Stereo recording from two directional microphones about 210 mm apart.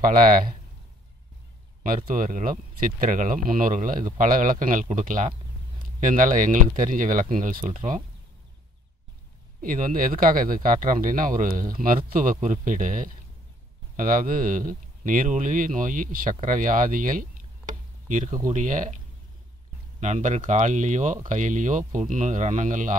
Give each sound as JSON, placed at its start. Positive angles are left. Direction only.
{"t": 0.0, "sound": "speech", "side_deg": -40}
{"t": 1.8, "sound": "speech", "side_deg": -40}
{"t": 9.6, "sound": "speech", "side_deg": -40}
{"t": 20.0, "sound": "speech", "side_deg": -35}